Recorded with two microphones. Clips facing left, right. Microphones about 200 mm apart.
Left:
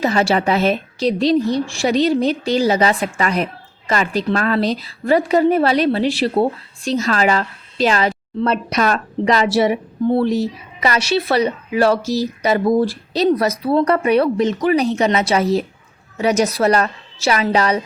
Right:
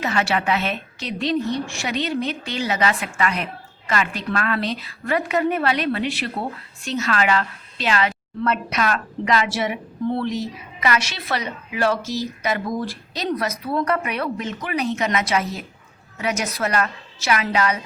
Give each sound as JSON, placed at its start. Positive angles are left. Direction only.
{"t": 0.0, "sound": "a woman's voice", "side_deg": 35}